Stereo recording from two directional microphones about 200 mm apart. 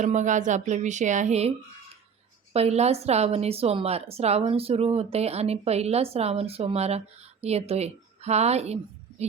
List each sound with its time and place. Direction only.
0.0 s a woman's voice: 35° right (ahead or behind)